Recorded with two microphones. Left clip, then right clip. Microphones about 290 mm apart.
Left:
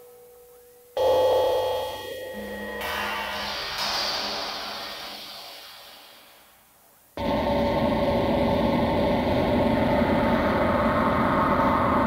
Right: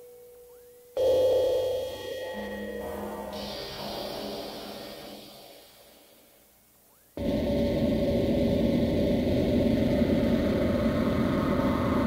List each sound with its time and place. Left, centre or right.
0.9 s a sound: centre
2.8 s a sound: left
3.4 s music: centre
3.8 s music: left
4.6 s music: centre
7.2 s vehicle: centre